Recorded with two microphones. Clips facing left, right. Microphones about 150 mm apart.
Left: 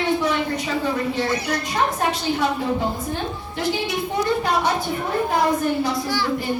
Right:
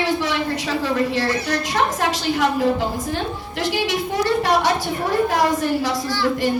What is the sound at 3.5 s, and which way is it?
A woman's voice, 90° right.